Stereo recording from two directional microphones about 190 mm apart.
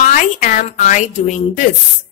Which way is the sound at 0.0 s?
45° left (ahead or behind).